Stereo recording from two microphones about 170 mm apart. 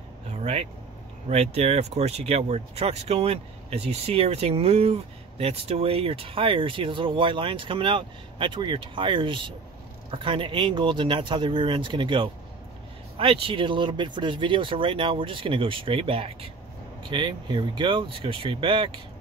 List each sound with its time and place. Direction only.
0.3 s vehicle: 40° right (ahead or behind)
1.3 s speech: 40° right (ahead or behind)